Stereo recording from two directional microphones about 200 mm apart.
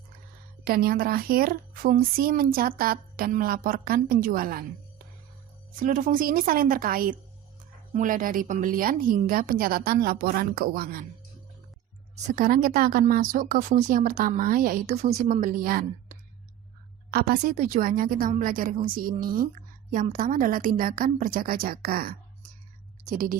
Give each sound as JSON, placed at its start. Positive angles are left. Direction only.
{"t": 0.6, "sound": "a woman's voice", "side_deg": -50}
{"t": 5.8, "sound": "a woman's voice", "side_deg": -45}
{"t": 12.1, "sound": "a woman's voice", "side_deg": -40}